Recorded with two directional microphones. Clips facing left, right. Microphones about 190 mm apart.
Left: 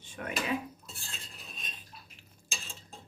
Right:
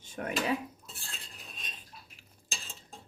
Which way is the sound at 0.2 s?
40° right (ahead or behind).